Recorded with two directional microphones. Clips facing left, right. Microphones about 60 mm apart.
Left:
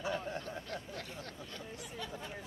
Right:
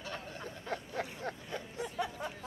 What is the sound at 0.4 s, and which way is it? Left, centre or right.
Snicker, right.